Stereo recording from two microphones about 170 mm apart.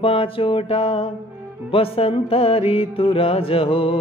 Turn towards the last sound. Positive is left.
turn(degrees=35)  # may be behind; listen again after turning